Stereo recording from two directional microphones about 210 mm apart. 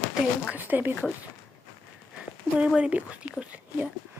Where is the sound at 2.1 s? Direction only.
5° right (ahead or behind).